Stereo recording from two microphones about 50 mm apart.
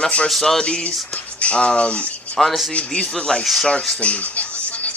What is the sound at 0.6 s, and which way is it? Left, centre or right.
Speech, left.